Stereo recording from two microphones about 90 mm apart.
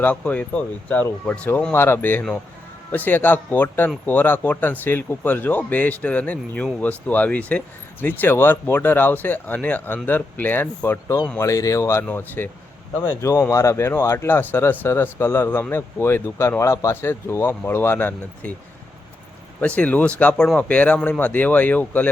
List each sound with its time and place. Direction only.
0.0 s speech: 15° left (ahead or behind)
1.7 s speech: 25° left (ahead or behind)
13.2 s speech: 35° left (ahead or behind)
19.5 s speech: 15° left (ahead or behind)